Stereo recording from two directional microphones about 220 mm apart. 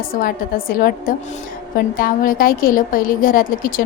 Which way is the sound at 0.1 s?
40° left (ahead or behind).